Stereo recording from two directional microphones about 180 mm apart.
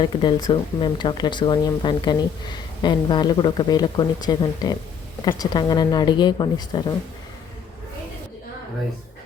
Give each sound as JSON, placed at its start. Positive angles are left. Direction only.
{"t": 0.0, "sound": "speech", "side_deg": 25}